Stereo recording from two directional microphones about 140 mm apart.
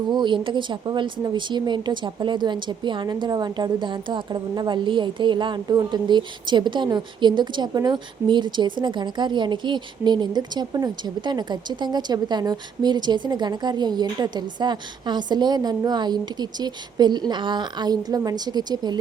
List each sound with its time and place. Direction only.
0.1 s a woman's voice: 30° right (ahead or behind)